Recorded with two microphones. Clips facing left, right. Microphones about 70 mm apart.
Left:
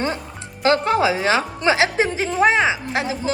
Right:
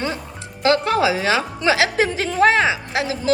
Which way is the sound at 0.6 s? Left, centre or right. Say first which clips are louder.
Even; left.